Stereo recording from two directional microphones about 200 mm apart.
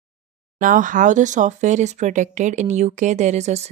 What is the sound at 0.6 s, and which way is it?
Speech, 40° right (ahead or behind).